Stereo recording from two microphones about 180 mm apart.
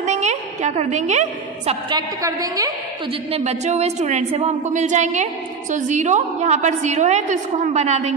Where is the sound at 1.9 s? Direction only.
20° right (ahead or behind).